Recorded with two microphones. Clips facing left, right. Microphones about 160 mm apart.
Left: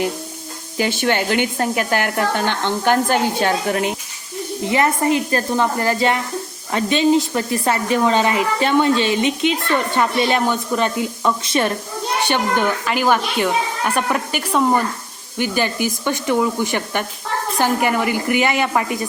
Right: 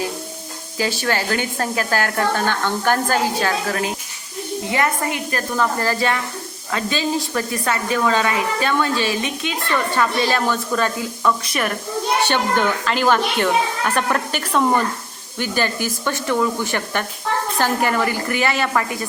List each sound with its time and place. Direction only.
0.8 s a child's voice: 25° left (ahead or behind)
12.3 s speech: 15° left (ahead or behind)